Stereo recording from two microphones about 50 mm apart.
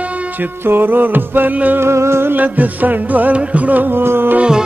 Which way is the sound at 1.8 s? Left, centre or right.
Right.